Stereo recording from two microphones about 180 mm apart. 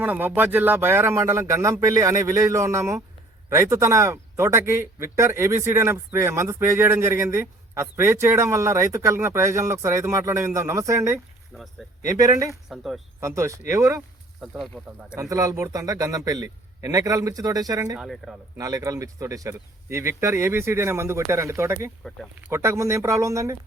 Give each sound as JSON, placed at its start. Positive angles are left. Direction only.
{"t": 0.0, "sound": "speech", "side_deg": -10}
{"t": 11.5, "sound": "a man's voice", "side_deg": 0}
{"t": 12.0, "sound": "a man's voice", "side_deg": -20}
{"t": 12.6, "sound": "a man's voice", "side_deg": 0}
{"t": 13.1, "sound": "speech", "side_deg": -15}
{"t": 14.4, "sound": "a man's voice", "side_deg": -5}
{"t": 15.2, "sound": "a man's voice", "side_deg": -20}
{"t": 18.0, "sound": "a man's voice", "side_deg": 0}
{"t": 18.5, "sound": "speech", "side_deg": -20}